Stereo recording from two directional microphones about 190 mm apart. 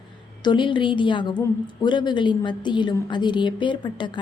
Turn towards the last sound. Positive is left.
turn(degrees=25)  # may be behind; listen again after turning